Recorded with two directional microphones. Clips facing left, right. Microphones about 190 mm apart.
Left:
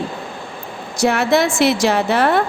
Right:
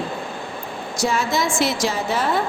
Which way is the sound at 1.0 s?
65° left (ahead or behind).